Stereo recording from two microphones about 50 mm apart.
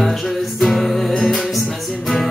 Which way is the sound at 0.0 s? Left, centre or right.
Centre.